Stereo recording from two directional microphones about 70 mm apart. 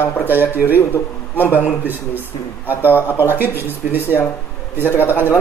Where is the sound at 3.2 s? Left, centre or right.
Right.